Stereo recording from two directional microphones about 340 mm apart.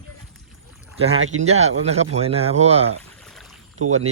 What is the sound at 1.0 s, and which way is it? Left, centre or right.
Speech, centre.